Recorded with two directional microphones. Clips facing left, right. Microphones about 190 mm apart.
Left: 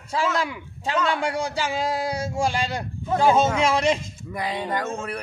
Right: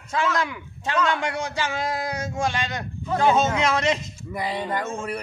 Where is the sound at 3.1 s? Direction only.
5° left (ahead or behind).